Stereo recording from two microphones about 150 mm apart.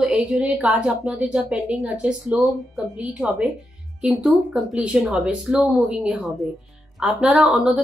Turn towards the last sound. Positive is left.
turn(degrees=-10)  # may be behind; listen again after turning